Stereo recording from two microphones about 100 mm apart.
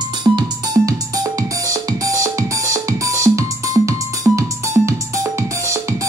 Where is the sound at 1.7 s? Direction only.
35° right (ahead or behind).